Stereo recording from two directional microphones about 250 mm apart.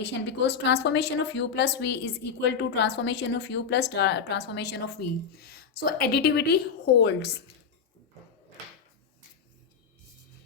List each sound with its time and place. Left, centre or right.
0.0 s a woman's voice: left